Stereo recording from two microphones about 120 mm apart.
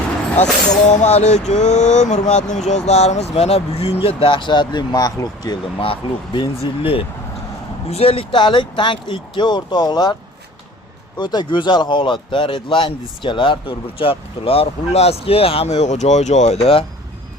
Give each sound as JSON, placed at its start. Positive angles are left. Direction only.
{"t": 0.9, "sound": "speech", "side_deg": 65}
{"t": 4.0, "sound": "speech", "side_deg": 45}
{"t": 5.8, "sound": "speech", "side_deg": 45}
{"t": 11.2, "sound": "speech", "side_deg": 35}